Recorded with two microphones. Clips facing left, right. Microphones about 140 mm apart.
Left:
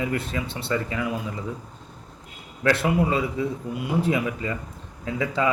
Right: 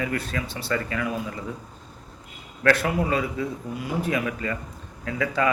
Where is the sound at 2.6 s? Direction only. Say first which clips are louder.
Even; 20° left (ahead or behind).